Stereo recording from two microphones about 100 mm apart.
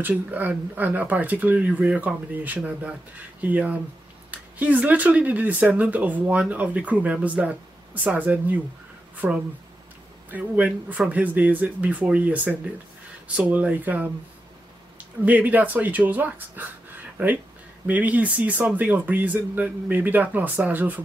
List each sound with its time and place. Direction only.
0.0 s speech: 15° right (ahead or behind)
15.2 s speech: 15° right (ahead or behind)